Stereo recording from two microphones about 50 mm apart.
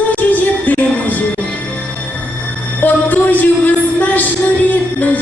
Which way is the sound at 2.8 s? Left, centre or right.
Left.